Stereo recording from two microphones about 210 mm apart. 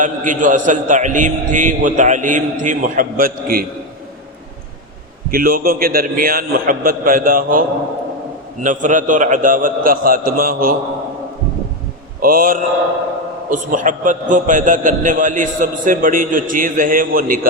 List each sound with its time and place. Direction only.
0.0 s a man's voice: 35° right (ahead or behind)
5.3 s a man's voice: 45° right (ahead or behind)
8.6 s a man's voice: 40° right (ahead or behind)
12.2 s a man's voice: 40° right (ahead or behind)